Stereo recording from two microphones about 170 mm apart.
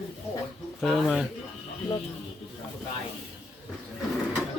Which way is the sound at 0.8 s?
Centre (ahead or behind).